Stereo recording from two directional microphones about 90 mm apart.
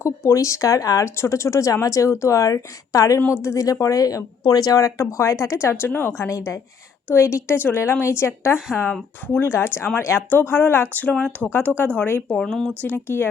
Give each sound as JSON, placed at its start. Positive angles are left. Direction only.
{"t": 0.0, "sound": "speech", "side_deg": 35}
{"t": 3.2, "sound": "speech", "side_deg": 25}
{"t": 8.9, "sound": "speech", "side_deg": 20}
{"t": 12.4, "sound": "speech", "side_deg": 5}
{"t": 12.8, "sound": "speech", "side_deg": 25}